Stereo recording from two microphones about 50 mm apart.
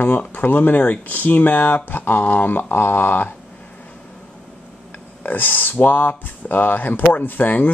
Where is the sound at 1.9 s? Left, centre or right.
Left.